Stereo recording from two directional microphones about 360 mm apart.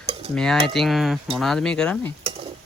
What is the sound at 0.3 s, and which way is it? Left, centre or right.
Speech, centre.